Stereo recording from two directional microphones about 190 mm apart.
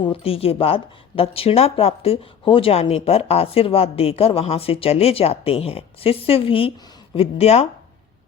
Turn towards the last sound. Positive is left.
turn(degrees=35)  # may be behind; listen again after turning